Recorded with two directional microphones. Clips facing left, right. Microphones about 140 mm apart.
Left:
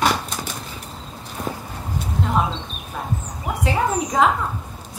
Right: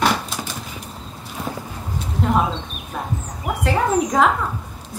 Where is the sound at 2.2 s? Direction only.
Centre (ahead or behind).